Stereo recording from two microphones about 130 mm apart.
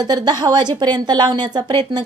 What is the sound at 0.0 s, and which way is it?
A woman's voice, 30° right (ahead or behind).